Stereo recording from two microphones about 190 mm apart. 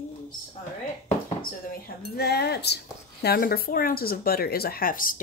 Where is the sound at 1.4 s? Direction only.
50° left (ahead or behind).